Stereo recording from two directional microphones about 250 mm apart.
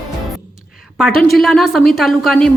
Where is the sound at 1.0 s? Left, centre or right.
Centre.